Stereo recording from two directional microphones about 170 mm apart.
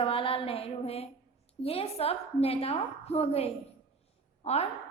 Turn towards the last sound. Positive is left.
turn(degrees=40)  # may be behind; listen again after turning